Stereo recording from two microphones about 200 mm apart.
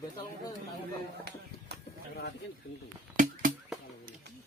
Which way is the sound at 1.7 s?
55° right (ahead or behind).